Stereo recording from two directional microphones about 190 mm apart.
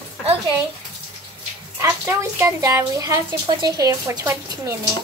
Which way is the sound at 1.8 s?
10° right (ahead or behind).